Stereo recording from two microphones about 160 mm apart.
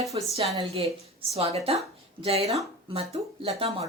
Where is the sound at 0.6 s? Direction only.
35° right (ahead or behind).